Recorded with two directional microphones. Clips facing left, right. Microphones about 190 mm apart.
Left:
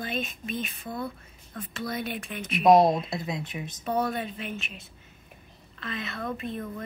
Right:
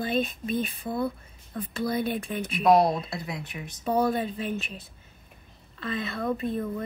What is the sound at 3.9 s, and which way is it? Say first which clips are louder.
Speech: right 4 dB; 30° right (ahead or behind).